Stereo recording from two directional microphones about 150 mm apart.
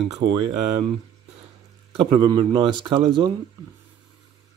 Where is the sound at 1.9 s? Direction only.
30° right (ahead or behind).